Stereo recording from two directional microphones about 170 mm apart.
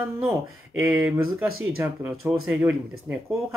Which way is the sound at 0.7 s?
10° right (ahead or behind).